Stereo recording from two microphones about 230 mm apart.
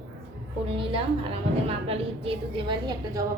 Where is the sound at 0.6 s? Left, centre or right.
Right.